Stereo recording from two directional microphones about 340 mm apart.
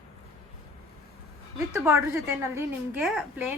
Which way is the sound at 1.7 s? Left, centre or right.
Centre.